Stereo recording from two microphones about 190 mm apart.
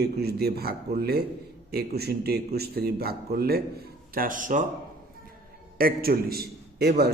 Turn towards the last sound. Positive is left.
turn(degrees=-55)  # may be behind; listen again after turning